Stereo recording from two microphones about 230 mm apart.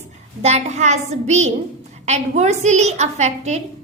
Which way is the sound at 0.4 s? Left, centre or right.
Right.